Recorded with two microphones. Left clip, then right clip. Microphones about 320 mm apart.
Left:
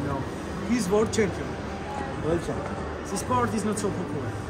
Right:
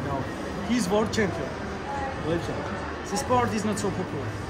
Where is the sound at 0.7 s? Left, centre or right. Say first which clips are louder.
Left 1 dB; centre.